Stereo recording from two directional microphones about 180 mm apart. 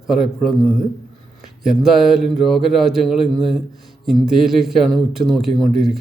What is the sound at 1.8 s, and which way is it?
A man's voice, centre (ahead or behind).